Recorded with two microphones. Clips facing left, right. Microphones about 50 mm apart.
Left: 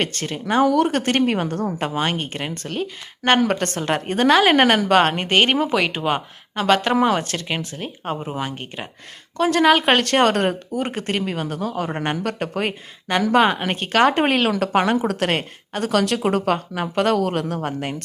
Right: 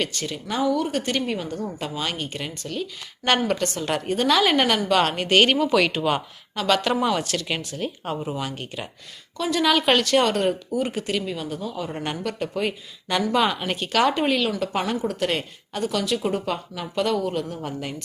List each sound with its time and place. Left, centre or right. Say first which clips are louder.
0.0 s speech: left 3 dB; left
0.7 s speech: left 5 dB; left
9.4 s speech: left 5 dB; left
15.0 s a woman's voice: left 3 dB; left
15.3 s speech: left 4 dB; left
16.7 s speech: left 2 dB; left